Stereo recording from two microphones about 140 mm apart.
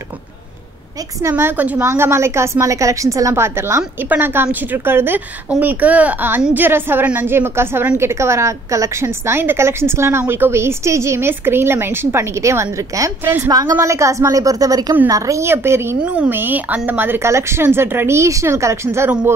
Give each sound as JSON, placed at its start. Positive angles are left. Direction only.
{"t": 1.2, "sound": "a woman's voice", "side_deg": -15}
{"t": 13.5, "sound": "a woman's voice", "side_deg": -25}